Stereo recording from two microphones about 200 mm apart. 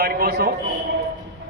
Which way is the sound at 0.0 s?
50° right (ahead or behind).